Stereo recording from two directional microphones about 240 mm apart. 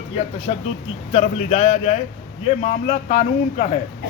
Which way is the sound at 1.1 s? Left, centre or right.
Left.